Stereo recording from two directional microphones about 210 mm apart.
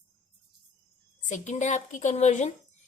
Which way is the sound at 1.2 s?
35° left (ahead or behind).